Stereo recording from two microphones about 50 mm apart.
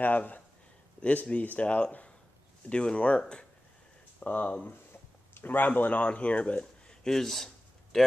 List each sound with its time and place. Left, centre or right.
0.0 s speech: left
4.2 s speech: left
5.3 s speech: left
6.6 s a sound: centre